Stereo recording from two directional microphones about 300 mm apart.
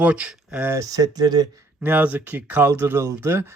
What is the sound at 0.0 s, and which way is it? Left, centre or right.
Speech, centre.